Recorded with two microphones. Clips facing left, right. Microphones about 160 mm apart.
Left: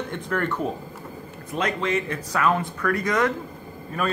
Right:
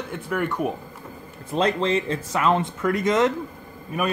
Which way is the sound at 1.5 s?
30° right (ahead or behind).